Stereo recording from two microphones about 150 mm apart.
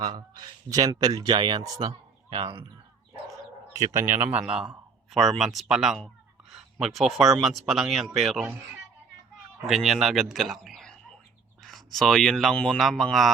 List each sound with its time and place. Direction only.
0.0 s speech: 30° right (ahead or behind)
3.3 s speech: 20° right (ahead or behind); by 8.5 s centre (ahead or behind)
9.6 s speech: centre (ahead or behind)